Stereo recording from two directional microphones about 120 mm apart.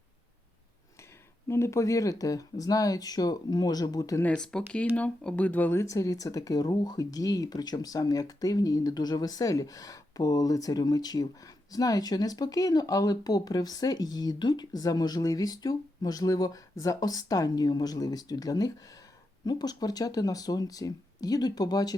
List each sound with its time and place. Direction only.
1.5 s speech: 25° left (ahead or behind)
4.2 s speech: 10° left (ahead or behind)
5.8 s speech: 25° left (ahead or behind)